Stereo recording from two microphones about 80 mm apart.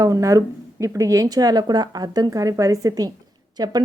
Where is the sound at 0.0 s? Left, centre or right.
Right.